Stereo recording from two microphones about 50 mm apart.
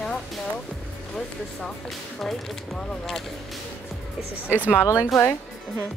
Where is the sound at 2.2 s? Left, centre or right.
Centre.